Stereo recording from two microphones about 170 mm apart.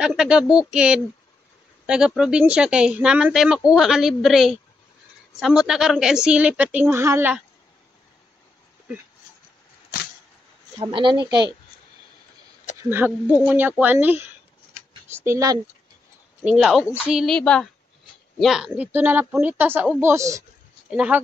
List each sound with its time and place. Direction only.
0.0 s speech: 5° right (ahead or behind)
10.8 s speech: 30° right (ahead or behind)
12.9 s a woman's voice: 10° right (ahead or behind)
16.4 s a woman's voice: centre (ahead or behind); by 20.4 s 20° right (ahead or behind)
20.9 s a woman's voice: 5° right (ahead or behind)